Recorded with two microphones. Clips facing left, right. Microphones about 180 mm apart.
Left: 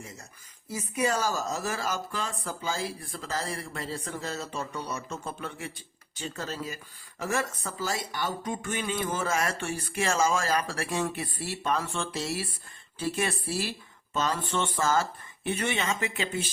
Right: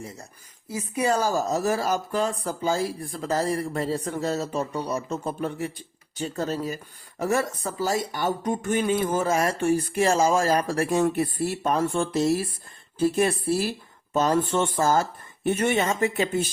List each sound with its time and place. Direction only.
0.9 s speech: 30° right (ahead or behind)